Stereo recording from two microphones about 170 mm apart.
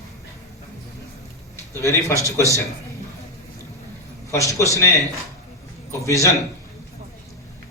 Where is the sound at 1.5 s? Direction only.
15° left (ahead or behind).